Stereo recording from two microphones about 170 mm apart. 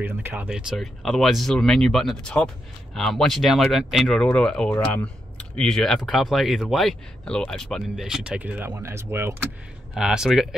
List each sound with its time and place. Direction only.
0.0 s speech: 10° right (ahead or behind)
9.9 s speech: 5° right (ahead or behind)